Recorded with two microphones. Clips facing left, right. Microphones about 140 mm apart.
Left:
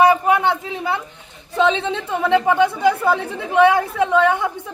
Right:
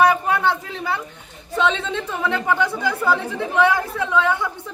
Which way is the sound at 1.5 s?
20° left (ahead or behind).